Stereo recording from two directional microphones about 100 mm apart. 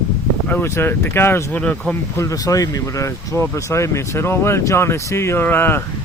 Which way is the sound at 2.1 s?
35° left (ahead or behind).